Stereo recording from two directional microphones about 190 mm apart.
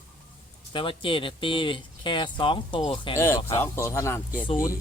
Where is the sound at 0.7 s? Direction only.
25° left (ahead or behind).